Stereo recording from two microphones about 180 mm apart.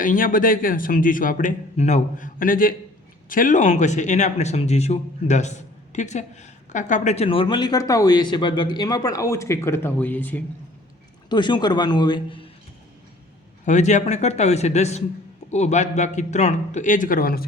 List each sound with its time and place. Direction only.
0.0 s a man's voice: 50° left (ahead or behind); by 10.4 s 10° left (ahead or behind)
11.3 s speech: 25° left (ahead or behind)
13.7 s speech: 40° left (ahead or behind)